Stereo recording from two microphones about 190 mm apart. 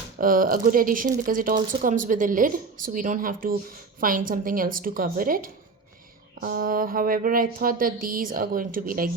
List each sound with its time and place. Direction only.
0.2 s speech: 50° right (ahead or behind)